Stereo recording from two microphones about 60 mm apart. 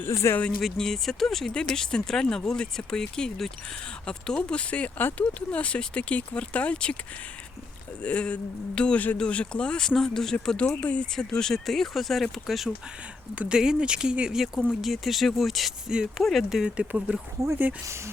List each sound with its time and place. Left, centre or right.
0.1 s speech: left
0.6 s speech: centre
8.0 s speech: left
10.6 s speech: left
11.1 s speech: centre
13.5 s speech: centre
14.7 s speech: centre
15.9 s speech: centre
16.2 s speech: centre
16.6 s speech: centre